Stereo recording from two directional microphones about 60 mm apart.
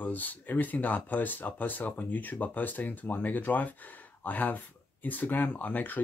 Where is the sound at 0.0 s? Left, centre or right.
Left.